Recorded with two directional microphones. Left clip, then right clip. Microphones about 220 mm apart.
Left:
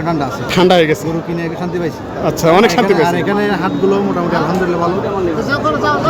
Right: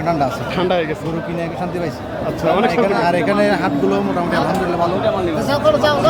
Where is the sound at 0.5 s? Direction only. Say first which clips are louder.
Left 10 dB; 50° left (ahead or behind).